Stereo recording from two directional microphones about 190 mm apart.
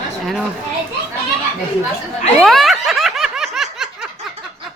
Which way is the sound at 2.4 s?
Centre (ahead or behind).